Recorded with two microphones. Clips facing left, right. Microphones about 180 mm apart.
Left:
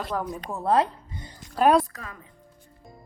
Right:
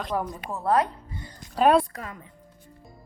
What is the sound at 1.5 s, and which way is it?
Speech, centre (ahead or behind).